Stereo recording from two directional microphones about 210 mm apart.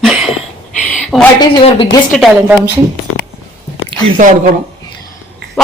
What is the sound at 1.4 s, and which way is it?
Speech, 20° left (ahead or behind).